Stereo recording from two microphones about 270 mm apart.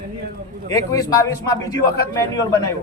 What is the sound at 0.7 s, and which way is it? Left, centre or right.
Speech, centre.